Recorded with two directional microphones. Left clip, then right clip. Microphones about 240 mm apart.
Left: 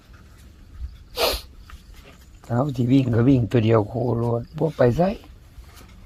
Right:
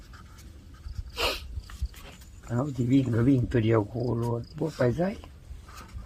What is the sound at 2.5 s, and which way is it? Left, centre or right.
Speech, left.